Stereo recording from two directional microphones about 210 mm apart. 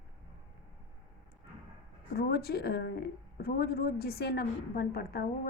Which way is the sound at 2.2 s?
50° left (ahead or behind).